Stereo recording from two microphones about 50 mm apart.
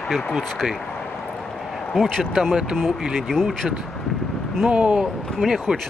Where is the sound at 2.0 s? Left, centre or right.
Centre.